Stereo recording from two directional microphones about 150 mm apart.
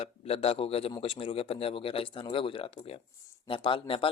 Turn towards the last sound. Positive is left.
turn(degrees=35)  # may be behind; listen again after turning